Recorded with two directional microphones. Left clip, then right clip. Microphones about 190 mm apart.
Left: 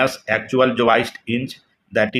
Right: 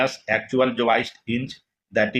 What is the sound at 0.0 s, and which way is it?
Speech, 25° left (ahead or behind).